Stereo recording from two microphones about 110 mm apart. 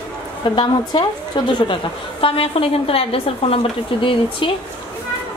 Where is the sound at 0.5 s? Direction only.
45° left (ahead or behind).